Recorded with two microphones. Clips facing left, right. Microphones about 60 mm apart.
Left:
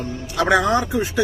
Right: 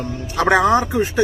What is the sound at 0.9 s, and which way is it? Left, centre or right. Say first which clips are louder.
Speech: right 3 dB; right.